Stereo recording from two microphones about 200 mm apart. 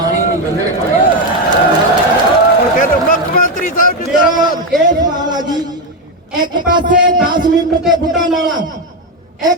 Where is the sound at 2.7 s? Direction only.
45° left (ahead or behind).